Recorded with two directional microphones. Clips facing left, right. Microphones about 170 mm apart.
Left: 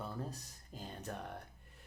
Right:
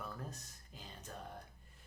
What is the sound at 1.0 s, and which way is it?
Speech, 70° left (ahead or behind).